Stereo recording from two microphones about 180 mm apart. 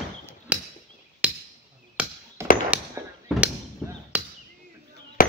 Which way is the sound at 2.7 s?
5° right (ahead or behind).